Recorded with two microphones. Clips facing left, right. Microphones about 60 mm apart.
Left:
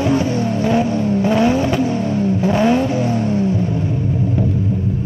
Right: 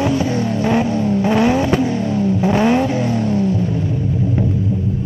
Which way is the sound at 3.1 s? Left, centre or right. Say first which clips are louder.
Even; left.